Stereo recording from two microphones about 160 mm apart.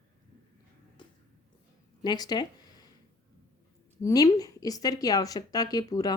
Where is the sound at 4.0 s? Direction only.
20° left (ahead or behind).